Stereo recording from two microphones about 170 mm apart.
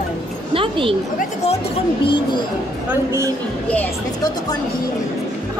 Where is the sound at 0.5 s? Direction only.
30° right (ahead or behind).